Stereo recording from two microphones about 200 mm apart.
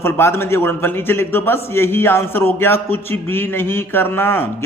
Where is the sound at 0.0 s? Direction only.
10° left (ahead or behind).